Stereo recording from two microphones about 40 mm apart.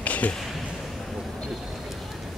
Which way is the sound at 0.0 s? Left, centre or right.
Left.